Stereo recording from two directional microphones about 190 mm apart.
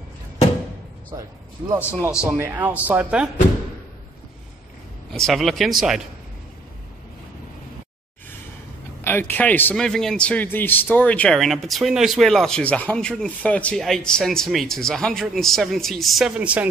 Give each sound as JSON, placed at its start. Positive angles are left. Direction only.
{"t": 1.1, "sound": "speech", "side_deg": -20}
{"t": 5.1, "sound": "a man's voice", "side_deg": 0}
{"t": 9.0, "sound": "a man's voice", "side_deg": 10}